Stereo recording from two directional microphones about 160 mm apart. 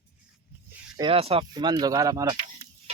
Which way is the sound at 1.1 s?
40° right (ahead or behind).